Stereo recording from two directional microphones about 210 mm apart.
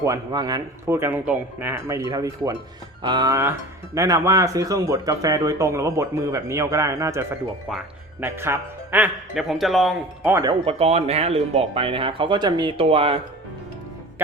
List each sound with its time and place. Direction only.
0.0 s speech: 15° right (ahead or behind); by 10.3 s centre (ahead or behind)
10.7 s speech: 30° right (ahead or behind)